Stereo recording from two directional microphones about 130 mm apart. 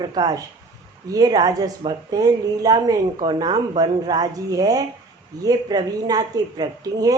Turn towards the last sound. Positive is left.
turn(degrees=-30)  # may be behind; listen again after turning